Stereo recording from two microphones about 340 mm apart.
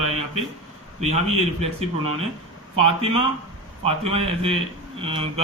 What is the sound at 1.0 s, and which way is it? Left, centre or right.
Speech, centre.